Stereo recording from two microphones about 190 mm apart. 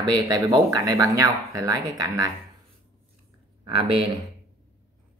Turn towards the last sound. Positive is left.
turn(degrees=-25)  # may be behind; listen again after turning